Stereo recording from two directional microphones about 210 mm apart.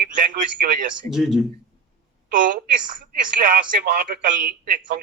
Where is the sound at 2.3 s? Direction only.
40° right (ahead or behind).